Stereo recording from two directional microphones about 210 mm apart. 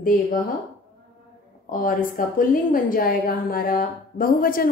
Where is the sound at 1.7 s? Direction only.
40° left (ahead or behind).